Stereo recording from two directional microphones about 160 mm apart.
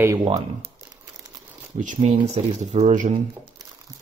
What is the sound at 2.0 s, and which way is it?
Speech, 40° right (ahead or behind).